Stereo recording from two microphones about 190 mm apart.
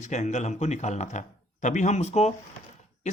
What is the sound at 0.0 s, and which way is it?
Speech, 40° left (ahead or behind).